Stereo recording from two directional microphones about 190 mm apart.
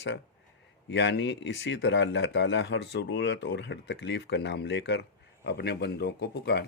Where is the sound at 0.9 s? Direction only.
65° left (ahead or behind).